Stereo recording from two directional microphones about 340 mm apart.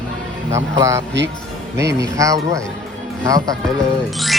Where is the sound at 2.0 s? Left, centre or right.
Centre.